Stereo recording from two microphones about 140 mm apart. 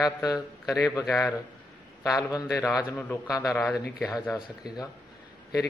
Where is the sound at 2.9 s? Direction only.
Centre (ahead or behind).